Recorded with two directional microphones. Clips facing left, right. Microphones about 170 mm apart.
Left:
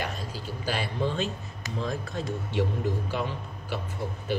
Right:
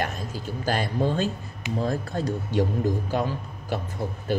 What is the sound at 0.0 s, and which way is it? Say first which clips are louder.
Speech: right 4 dB; 45° right (ahead or behind).